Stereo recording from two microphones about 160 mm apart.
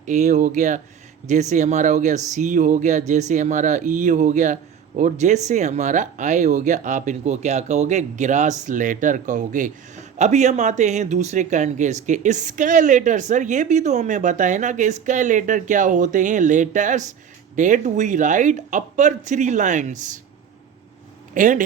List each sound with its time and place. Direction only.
0.0 s speech: 50° right (ahead or behind)
21.3 s speech: 55° right (ahead or behind)